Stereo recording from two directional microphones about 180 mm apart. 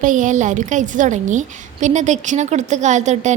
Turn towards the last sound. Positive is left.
turn(degrees=-40)  # may be behind; listen again after turning